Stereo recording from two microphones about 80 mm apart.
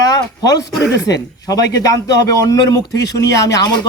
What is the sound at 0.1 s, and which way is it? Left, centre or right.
A man's voice, left.